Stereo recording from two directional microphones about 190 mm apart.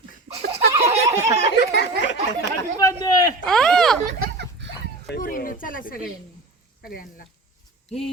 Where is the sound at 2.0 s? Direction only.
70° left (ahead or behind).